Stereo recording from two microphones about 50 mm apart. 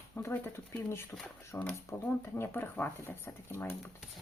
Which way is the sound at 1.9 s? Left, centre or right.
Left.